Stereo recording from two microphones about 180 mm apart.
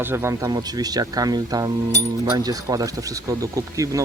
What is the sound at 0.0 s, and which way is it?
Speech, 15° right (ahead or behind).